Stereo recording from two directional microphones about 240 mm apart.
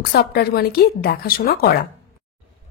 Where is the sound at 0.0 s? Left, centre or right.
Left.